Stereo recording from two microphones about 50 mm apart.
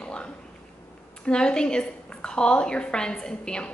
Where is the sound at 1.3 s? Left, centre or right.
Centre.